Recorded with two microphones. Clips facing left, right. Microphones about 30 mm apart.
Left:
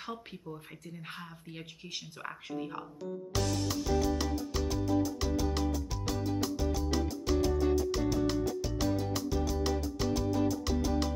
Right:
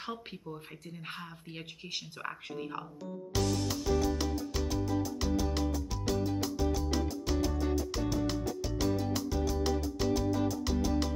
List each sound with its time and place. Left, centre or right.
0.0 s speech: right
3.0 s music: centre